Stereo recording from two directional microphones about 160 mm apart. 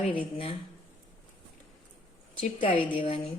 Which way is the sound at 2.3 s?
35° left (ahead or behind).